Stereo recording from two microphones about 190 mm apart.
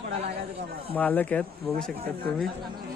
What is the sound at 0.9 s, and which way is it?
Speech, 10° left (ahead or behind).